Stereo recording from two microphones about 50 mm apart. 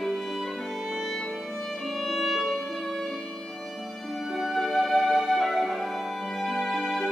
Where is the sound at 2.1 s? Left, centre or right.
Centre.